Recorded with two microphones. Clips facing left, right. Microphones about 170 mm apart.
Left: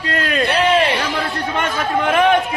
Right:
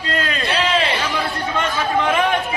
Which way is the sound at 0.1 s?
60° left (ahead or behind).